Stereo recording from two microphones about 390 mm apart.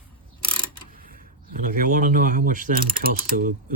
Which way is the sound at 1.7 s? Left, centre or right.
Right.